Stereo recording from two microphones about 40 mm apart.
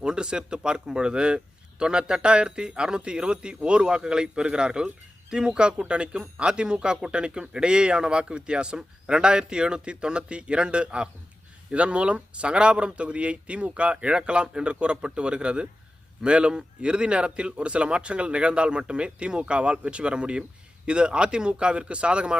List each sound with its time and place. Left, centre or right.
0.0 s a man's voice: right